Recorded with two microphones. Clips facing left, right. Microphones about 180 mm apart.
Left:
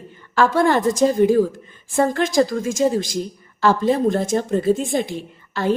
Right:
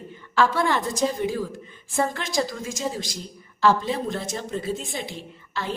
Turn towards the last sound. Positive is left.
turn(degrees=50)  # may be behind; listen again after turning